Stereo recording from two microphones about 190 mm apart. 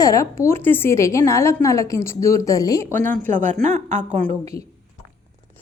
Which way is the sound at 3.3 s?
40° right (ahead or behind).